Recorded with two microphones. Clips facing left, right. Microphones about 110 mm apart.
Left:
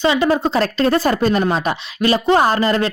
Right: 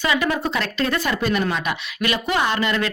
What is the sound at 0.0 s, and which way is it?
Speech, 25° left (ahead or behind).